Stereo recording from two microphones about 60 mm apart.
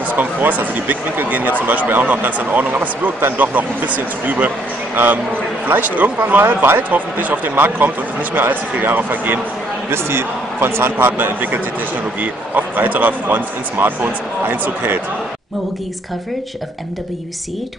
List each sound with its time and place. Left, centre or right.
0.1 s speech: right